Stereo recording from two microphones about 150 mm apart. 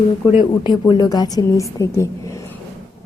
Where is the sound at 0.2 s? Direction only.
25° left (ahead or behind).